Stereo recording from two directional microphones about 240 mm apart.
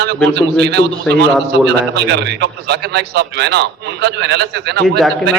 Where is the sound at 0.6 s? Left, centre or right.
Right.